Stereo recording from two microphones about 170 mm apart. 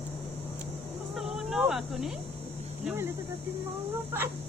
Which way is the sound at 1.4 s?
5° right (ahead or behind).